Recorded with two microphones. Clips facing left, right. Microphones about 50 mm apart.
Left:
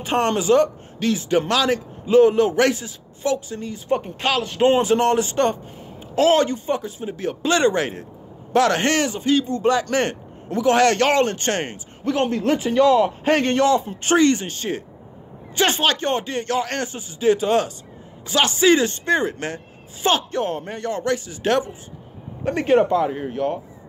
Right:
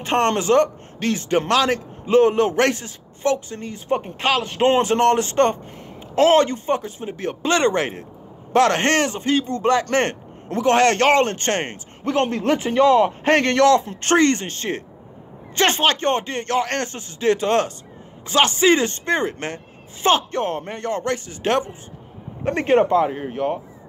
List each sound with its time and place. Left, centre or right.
0.0 s a man's voice: right
3.9 s speech: right
4.6 s a man's voice: right
18.3 s speech: right
23.0 s speech: right